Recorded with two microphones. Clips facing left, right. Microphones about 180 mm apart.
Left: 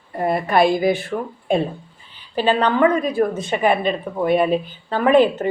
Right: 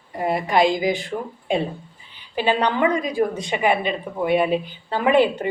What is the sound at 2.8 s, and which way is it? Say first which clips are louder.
Speech: left 4 dB; 15° right (ahead or behind).